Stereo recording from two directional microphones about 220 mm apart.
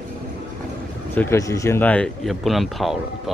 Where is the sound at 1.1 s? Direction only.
10° left (ahead or behind).